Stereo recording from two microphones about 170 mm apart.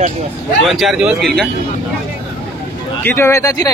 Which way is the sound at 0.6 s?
Centre (ahead or behind).